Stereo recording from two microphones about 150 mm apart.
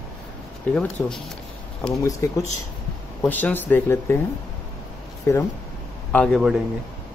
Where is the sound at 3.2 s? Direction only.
10° left (ahead or behind).